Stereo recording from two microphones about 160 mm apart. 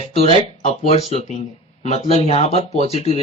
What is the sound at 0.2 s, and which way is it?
Speech, 40° left (ahead or behind).